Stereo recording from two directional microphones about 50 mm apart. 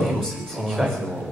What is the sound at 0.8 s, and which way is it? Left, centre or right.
Speech, centre.